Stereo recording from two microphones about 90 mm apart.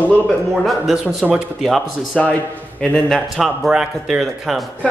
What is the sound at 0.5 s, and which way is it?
Speech, 5° right (ahead or behind).